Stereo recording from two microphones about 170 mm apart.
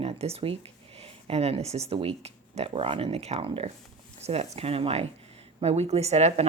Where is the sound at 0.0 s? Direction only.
35° right (ahead or behind).